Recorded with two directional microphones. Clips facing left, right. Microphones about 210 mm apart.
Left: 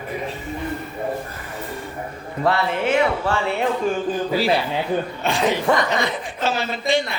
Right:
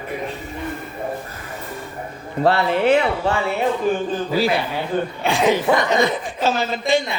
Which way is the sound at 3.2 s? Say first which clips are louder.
Right 2 dB; 25° right (ahead or behind).